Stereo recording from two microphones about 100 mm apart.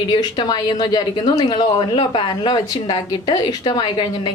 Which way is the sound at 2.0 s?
60° left (ahead or behind).